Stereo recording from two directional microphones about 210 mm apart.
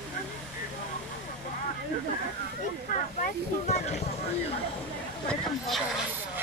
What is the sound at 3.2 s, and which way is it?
Speech, 35° left (ahead or behind).